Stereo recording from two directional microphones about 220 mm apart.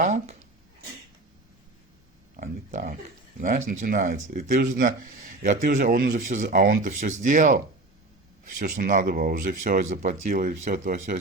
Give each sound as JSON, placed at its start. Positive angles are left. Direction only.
{"t": 0.0, "sound": "speech", "side_deg": -35}
{"t": 2.3, "sound": "a sound", "side_deg": -35}
{"t": 3.7, "sound": "speech", "side_deg": -35}